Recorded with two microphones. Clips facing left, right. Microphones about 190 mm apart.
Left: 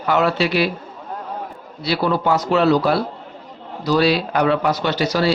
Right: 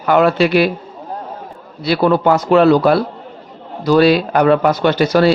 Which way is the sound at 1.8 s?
55° right (ahead or behind).